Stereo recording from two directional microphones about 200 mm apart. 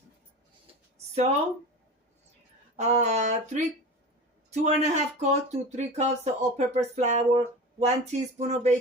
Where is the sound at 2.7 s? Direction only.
35° right (ahead or behind).